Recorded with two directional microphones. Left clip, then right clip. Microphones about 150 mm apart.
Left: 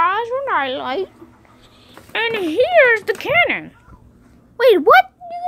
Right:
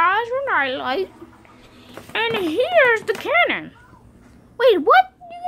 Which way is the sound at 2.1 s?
20° left (ahead or behind).